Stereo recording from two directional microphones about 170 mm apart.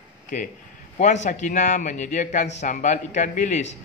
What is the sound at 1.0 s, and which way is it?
Speech, 45° left (ahead or behind).